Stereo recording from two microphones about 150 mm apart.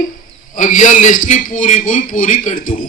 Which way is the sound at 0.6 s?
60° left (ahead or behind).